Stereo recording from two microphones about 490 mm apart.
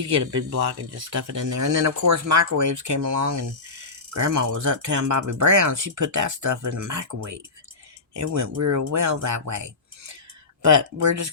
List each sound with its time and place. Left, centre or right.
0.1 s speech: right
11.0 s speech: right